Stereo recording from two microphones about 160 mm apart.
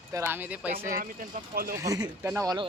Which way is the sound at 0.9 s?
60° right (ahead or behind).